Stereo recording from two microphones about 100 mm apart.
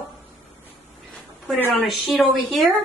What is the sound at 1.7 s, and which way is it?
A woman's voice, centre (ahead or behind).